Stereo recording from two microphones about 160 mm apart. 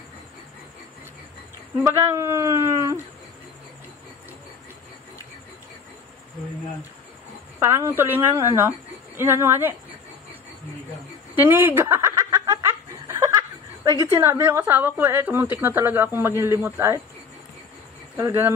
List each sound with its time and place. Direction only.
1.9 s speech: 15° right (ahead or behind)
7.5 s a woman's voice: 15° right (ahead or behind)
11.3 s a sound: 10° right (ahead or behind)
13.8 s a woman's voice: 20° right (ahead or behind)
18.1 s cricket: 15° right (ahead or behind)